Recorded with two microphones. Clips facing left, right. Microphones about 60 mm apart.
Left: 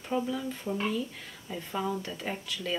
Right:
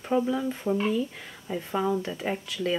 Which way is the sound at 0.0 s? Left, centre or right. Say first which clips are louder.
Right 6 dB; centre.